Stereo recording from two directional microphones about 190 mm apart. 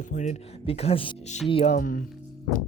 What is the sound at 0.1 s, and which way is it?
Speech, 40° left (ahead or behind).